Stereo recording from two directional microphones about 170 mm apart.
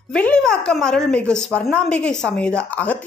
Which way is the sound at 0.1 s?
5° left (ahead or behind).